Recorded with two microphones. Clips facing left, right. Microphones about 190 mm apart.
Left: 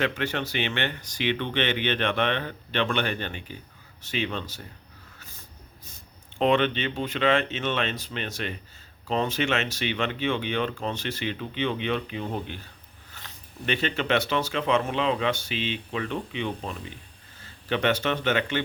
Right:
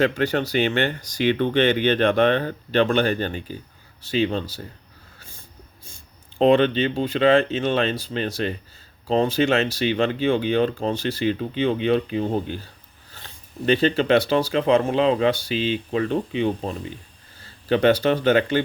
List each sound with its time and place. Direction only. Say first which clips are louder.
0.0 s speech: right 7 dB; 40° right (ahead or behind)
6.4 s speech: right 6 dB; 35° right (ahead or behind)